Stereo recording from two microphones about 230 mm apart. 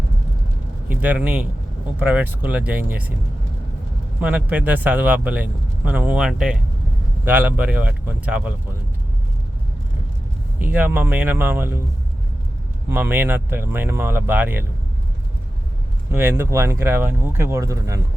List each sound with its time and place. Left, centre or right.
0.9 s a man's voice: centre
4.2 s a man's voice: centre
10.6 s a man's voice: centre
12.9 s a man's voice: centre
16.1 s a man's voice: centre